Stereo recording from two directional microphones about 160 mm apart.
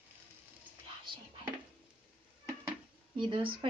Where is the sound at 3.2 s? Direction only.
30° right (ahead or behind).